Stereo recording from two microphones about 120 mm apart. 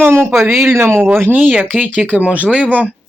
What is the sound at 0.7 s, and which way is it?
Speech, 20° right (ahead or behind).